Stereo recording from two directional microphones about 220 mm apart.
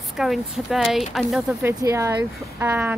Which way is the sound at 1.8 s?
15° right (ahead or behind).